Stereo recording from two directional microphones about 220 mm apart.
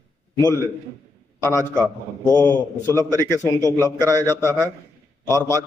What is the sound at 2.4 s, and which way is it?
Speech, 10° left (ahead or behind).